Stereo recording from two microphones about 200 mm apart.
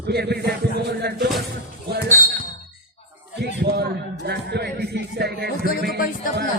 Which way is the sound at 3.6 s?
50° right (ahead or behind).